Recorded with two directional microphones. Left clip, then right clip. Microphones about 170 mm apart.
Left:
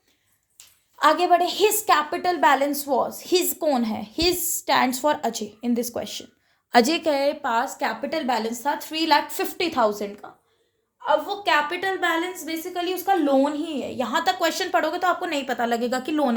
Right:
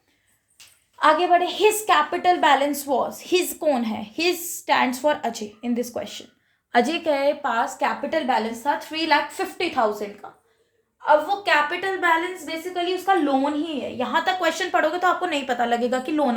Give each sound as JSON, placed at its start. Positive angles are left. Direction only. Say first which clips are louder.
{"t": 0.9, "sound": "a woman's voice", "louder": "right 1 dB", "side_deg": 90}
{"t": 1.9, "sound": "a woman's voice", "louder": "right 2 dB", "side_deg": 35}
{"t": 8.3, "sound": "a woman's voice", "louder": "right 1 dB", "side_deg": 75}
{"t": 10.2, "sound": "a woman's voice", "louder": "right 1 dB", "side_deg": 60}
{"t": 12.7, "sound": "a woman's voice", "louder": "right 2 dB", "side_deg": 90}